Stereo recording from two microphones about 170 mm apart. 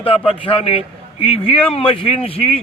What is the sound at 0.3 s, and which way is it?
A man's voice, 30° left (ahead or behind).